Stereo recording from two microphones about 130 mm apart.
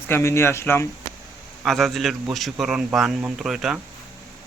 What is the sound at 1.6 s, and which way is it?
A man's voice, centre (ahead or behind).